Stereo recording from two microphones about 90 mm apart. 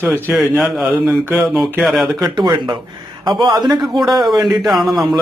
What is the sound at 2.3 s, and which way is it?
Speech, 55° right (ahead or behind).